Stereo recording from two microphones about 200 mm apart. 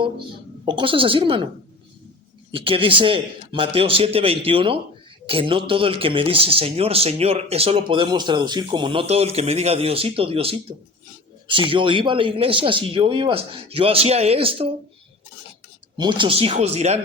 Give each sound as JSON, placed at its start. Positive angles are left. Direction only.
{"t": 0.0, "sound": "speech", "side_deg": -25}
{"t": 2.5, "sound": "speech", "side_deg": -25}
{"t": 16.0, "sound": "speech", "side_deg": -25}